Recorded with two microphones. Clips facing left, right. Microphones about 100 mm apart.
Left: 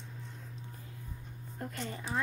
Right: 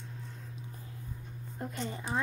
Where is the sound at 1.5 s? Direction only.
20° right (ahead or behind).